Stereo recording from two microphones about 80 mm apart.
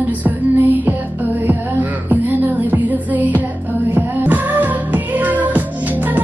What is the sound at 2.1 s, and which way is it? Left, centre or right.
Music, right.